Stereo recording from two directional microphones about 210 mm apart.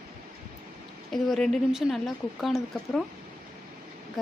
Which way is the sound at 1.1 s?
Centre (ahead or behind).